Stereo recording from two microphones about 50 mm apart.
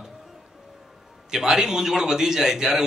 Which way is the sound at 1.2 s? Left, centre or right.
Centre.